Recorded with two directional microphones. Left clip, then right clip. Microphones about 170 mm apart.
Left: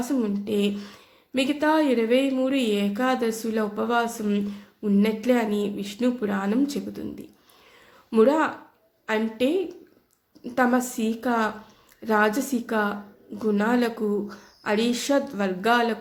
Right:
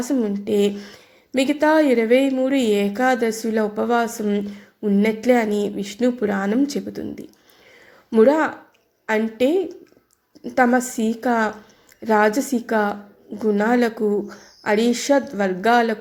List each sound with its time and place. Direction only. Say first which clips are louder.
0.0 s speech: right 4 dB; 30° right (ahead or behind)